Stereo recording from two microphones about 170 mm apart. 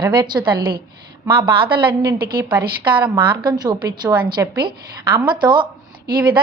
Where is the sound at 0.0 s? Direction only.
25° right (ahead or behind).